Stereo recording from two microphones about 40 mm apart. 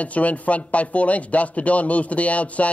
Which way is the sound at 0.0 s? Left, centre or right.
Left.